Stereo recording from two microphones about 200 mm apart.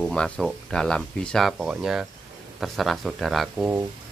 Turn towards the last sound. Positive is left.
turn(degrees=-5)  # may be behind; listen again after turning